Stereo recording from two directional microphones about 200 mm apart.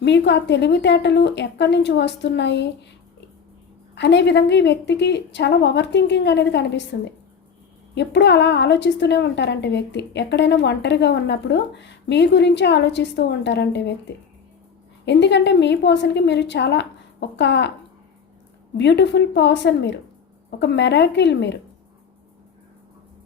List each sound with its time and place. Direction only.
0.0 s a woman's voice: 60° left (ahead or behind)
3.9 s a woman's voice: 60° left (ahead or behind)
15.0 s a woman's voice: 60° left (ahead or behind)
18.8 s a woman's voice: 60° left (ahead or behind)